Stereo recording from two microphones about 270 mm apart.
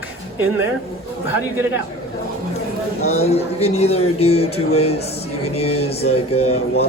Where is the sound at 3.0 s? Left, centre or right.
Left.